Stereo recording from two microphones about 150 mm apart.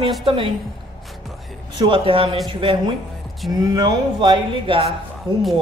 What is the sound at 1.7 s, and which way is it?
Speech, 35° right (ahead or behind).